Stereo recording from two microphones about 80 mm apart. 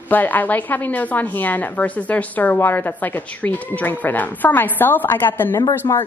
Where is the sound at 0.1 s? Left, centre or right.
Left.